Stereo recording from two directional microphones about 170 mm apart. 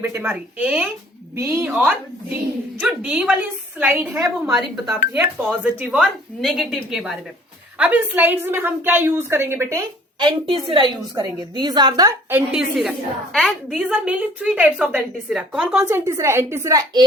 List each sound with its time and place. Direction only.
0.0 s a woman's voice: 15° right (ahead or behind)
4.1 s a woman's voice: 20° right (ahead or behind)
10.2 s a woman's voice: 30° right (ahead or behind)
12.3 s a woman's voice: 5° right (ahead or behind)
15.8 s a woman's voice: 15° right (ahead or behind)